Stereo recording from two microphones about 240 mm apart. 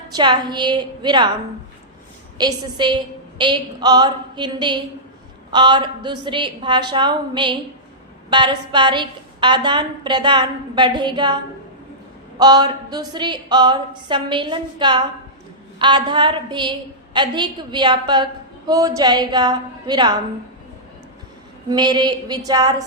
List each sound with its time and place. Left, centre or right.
0.1 s a woman's voice: centre
2.4 s a woman's voice: centre
12.4 s a woman's voice: centre
21.7 s a woman's voice: centre